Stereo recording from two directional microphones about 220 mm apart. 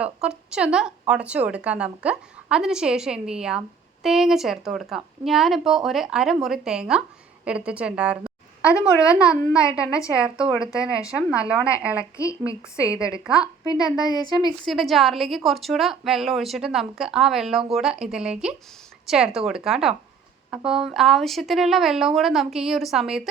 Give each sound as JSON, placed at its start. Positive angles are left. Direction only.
{"t": 0.0, "sound": "a woman's voice", "side_deg": -5}
{"t": 12.1, "sound": "a woman's voice", "side_deg": 15}
{"t": 12.7, "sound": "a woman's voice", "side_deg": -5}
{"t": 13.7, "sound": "a woman's voice", "side_deg": 15}
{"t": 14.6, "sound": "a woman's voice", "side_deg": 0}